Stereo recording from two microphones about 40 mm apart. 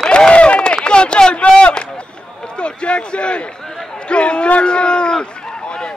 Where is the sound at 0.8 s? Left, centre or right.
Left.